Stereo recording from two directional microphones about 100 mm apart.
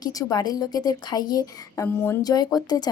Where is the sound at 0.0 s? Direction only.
35° left (ahead or behind).